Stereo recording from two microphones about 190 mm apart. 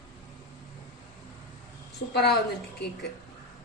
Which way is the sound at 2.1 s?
60° left (ahead or behind).